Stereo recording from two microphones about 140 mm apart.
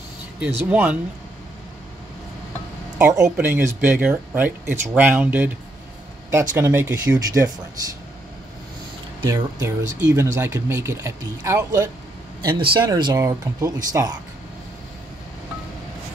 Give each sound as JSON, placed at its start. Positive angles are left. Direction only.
{"t": 0.4, "sound": "speech", "side_deg": -10}
{"t": 3.0, "sound": "speech", "side_deg": -20}
{"t": 6.5, "sound": "speech", "side_deg": -15}
{"t": 9.2, "sound": "speech", "side_deg": -20}
{"t": 12.5, "sound": "speech", "side_deg": -35}